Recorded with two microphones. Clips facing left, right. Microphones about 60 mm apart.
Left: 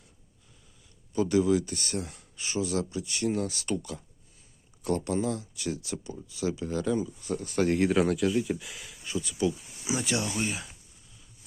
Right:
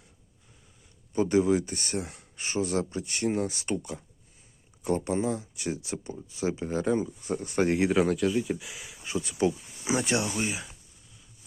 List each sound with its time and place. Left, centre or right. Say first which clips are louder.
1.1 s speech: right 1 dB; right
7.7 s speech: even; centre
9.0 s speech: right 2 dB; right
10.3 s speech: right 1 dB; centre